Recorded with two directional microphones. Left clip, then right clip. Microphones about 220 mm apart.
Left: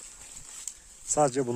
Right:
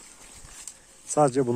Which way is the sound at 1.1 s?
Centre (ahead or behind).